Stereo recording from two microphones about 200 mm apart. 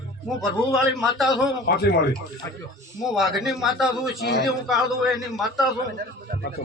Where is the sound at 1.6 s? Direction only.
50° left (ahead or behind).